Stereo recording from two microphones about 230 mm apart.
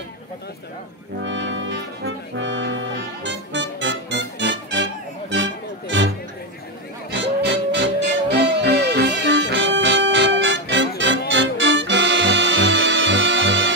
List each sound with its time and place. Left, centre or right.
1.2 s brass instrument: right
5.3 s music: right